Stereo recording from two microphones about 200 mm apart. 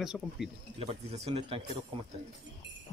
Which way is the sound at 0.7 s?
30° right (ahead or behind).